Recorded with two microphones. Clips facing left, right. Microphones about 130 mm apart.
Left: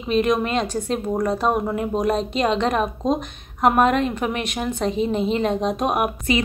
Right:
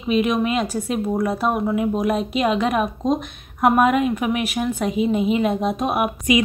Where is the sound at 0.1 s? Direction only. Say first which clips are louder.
Even; 5° right (ahead or behind).